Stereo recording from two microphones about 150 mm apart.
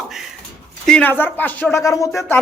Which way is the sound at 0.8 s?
10° left (ahead or behind).